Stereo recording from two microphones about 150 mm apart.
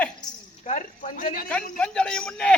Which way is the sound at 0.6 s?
50° left (ahead or behind).